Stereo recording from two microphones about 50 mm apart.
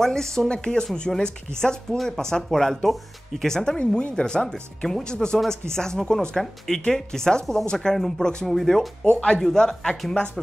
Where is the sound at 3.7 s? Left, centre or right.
Left.